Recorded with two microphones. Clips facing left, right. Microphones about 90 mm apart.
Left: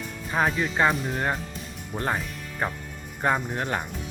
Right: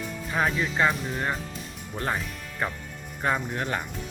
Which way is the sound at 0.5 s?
40° left (ahead or behind).